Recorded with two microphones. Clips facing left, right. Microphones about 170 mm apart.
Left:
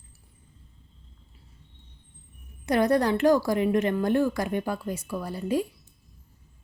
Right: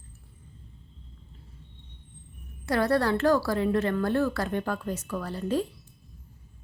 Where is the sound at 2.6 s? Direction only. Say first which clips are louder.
Left 2 dB; 20° left (ahead or behind).